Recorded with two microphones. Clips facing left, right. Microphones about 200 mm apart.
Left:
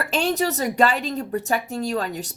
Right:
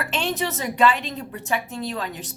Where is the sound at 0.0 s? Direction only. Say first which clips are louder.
Left 4 dB; 40° left (ahead or behind).